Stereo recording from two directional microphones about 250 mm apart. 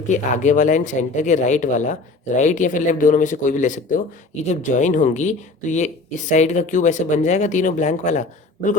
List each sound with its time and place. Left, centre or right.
0.1 s speech: left